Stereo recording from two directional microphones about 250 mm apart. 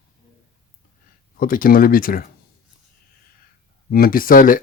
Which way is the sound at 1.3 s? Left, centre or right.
Left.